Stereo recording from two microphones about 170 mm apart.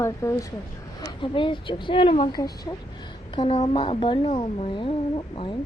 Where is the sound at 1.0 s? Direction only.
30° left (ahead or behind).